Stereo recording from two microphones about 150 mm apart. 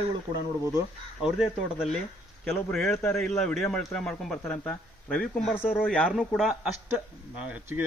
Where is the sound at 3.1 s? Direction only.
Centre (ahead or behind).